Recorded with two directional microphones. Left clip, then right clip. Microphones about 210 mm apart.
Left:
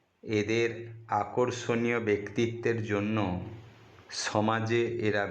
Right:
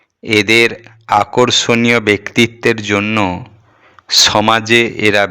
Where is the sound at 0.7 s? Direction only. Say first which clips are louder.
Right 18 dB; 30° right (ahead or behind); by 2.1 s 50° right (ahead or behind).